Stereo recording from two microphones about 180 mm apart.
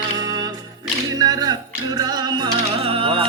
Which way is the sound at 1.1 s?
20° right (ahead or behind).